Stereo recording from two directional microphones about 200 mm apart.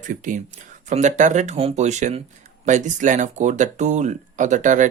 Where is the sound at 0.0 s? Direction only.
40° right (ahead or behind).